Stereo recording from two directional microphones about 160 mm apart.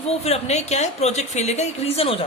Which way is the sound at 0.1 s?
40° left (ahead or behind).